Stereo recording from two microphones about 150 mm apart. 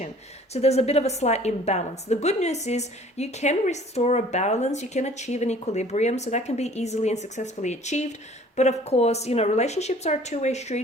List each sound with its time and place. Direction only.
0.5 s a woman's voice: 45° left (ahead or behind)